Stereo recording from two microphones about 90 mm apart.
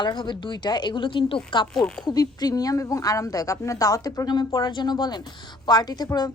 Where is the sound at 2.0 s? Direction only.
45° left (ahead or behind).